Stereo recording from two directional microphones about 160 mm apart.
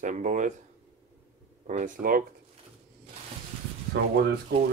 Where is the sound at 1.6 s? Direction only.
50° right (ahead or behind).